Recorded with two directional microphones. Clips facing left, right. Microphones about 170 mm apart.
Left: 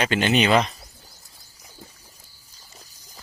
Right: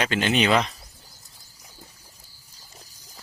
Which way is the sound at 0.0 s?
Centre (ahead or behind).